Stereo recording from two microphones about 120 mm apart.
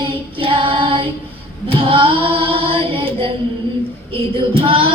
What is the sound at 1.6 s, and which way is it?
Female singing, 50° right (ahead or behind).